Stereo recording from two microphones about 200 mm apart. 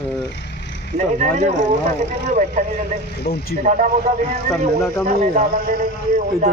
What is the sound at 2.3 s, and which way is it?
Speech, 35° right (ahead or behind).